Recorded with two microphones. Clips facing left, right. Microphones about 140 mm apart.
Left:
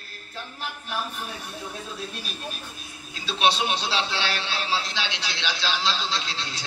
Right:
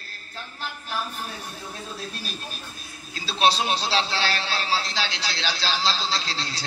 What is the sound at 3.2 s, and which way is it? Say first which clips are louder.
A man's voice: right 1 dB; 35° right (ahead or behind).